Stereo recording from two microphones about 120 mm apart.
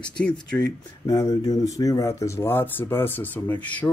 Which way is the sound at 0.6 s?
30° left (ahead or behind).